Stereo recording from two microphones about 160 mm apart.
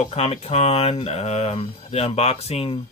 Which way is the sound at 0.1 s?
40° left (ahead or behind).